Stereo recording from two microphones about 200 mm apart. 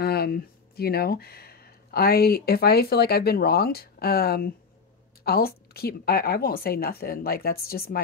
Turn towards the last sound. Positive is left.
turn(degrees=50)  # may be behind; listen again after turning